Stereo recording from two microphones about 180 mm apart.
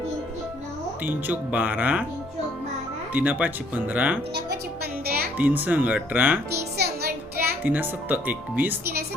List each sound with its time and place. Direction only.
1.0 s speech: 10° right (ahead or behind)
3.1 s speech: 10° right (ahead or behind)
5.0 s music: 60° right (ahead or behind)
5.4 s speech: 10° right (ahead or behind)
6.6 s music: 65° right (ahead or behind)
7.3 s a child's voice: 10° right (ahead or behind)